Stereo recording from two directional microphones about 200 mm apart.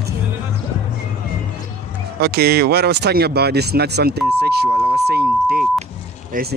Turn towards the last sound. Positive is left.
turn(degrees=-45)  # may be behind; listen again after turning